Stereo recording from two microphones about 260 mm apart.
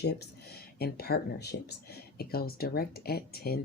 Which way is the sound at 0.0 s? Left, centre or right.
Left.